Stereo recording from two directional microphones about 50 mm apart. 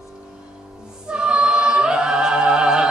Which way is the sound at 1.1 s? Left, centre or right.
Centre.